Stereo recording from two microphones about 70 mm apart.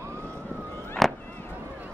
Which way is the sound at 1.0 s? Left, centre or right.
Centre.